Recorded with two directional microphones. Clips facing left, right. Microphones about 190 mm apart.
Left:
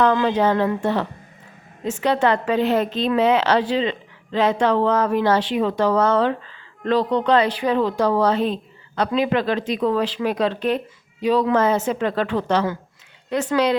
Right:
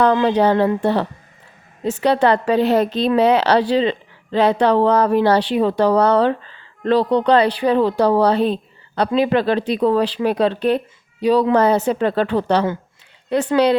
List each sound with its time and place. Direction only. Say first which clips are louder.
0.0 s speech: right 3 dB; 35° right (ahead or behind)